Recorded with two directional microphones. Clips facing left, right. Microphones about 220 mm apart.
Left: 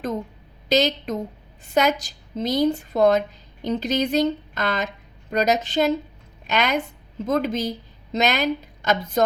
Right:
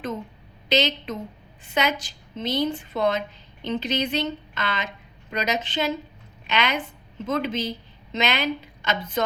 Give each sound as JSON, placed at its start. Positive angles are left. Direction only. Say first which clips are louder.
{"t": 0.7, "sound": "a woman's voice", "louder": "left 3 dB", "side_deg": 40}